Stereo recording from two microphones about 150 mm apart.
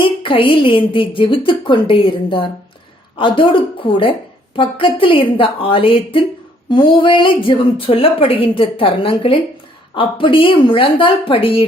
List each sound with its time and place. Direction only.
0.0 s a woman's voice: 35° left (ahead or behind)